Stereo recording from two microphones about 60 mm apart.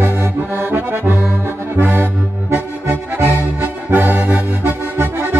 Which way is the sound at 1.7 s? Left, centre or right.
Right.